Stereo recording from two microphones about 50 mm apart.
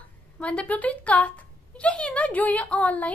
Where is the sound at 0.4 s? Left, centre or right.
Left.